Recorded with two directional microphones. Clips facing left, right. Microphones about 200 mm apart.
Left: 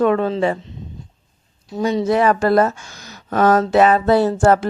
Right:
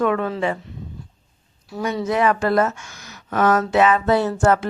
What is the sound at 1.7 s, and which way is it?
Speech, 25° left (ahead or behind).